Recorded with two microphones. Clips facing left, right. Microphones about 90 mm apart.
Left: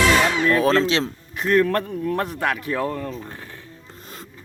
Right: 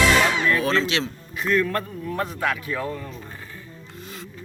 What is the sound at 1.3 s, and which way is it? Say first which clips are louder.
Speech: left 4 dB; 55° left (ahead or behind).